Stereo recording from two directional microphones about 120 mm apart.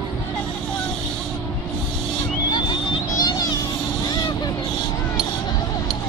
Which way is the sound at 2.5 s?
40° left (ahead or behind).